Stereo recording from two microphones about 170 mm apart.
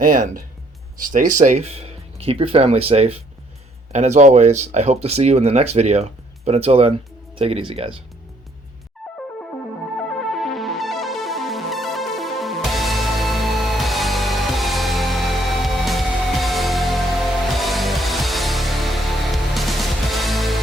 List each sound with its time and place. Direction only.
0.0 s speech: 55° right (ahead or behind); by 7.9 s 35° right (ahead or behind)
10.0 s music: centre (ahead or behind)